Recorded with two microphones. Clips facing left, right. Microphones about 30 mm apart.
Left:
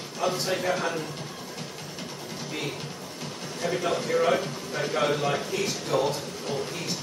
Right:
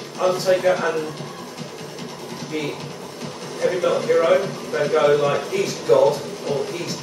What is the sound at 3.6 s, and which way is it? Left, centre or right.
A man's voice, centre.